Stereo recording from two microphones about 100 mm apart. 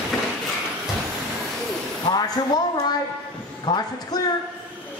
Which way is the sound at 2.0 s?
45° left (ahead or behind).